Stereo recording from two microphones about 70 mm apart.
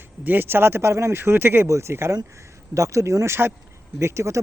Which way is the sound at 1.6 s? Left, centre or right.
Right.